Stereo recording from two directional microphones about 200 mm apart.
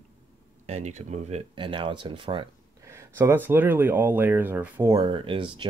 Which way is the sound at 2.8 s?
15° right (ahead or behind).